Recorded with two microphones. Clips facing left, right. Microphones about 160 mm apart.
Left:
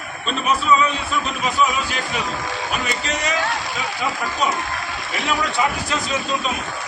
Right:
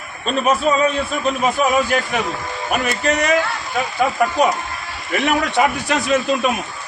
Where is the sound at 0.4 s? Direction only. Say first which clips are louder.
Right 2 dB; 50° right (ahead or behind).